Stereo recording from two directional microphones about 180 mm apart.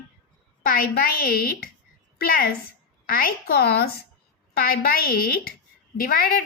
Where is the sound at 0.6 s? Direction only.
50° left (ahead or behind).